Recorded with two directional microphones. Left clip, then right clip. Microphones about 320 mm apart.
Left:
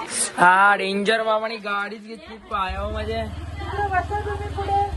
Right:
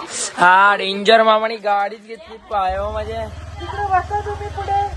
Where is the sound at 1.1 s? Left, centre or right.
Right.